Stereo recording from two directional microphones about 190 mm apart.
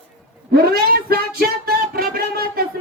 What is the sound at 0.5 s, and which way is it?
Speech, 50° right (ahead or behind).